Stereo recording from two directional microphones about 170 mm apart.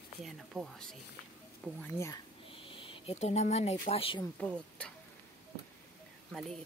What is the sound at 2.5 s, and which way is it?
Speech, 30° left (ahead or behind).